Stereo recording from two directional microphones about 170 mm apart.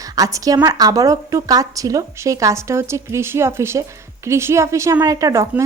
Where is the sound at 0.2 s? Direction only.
20° right (ahead or behind).